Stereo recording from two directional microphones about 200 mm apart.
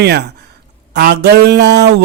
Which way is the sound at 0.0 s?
55° right (ahead or behind).